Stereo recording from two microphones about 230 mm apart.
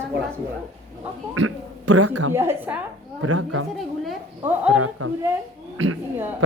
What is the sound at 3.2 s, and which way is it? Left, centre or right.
Speech, right.